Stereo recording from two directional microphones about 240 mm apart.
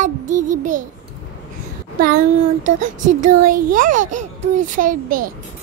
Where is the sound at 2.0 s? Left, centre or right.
Right.